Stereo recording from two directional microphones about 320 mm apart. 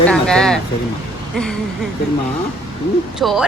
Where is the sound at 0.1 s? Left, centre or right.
Centre.